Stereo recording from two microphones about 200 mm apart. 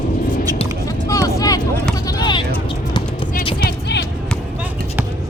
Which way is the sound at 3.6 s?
55° left (ahead or behind).